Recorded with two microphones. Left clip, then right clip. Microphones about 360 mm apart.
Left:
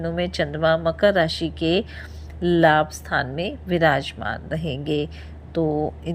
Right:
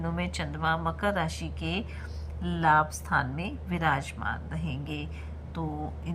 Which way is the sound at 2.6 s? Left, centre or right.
Centre.